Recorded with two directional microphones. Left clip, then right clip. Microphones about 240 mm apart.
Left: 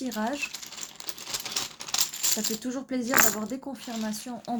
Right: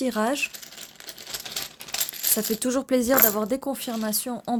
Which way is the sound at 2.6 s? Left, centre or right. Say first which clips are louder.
Right 9 dB; right.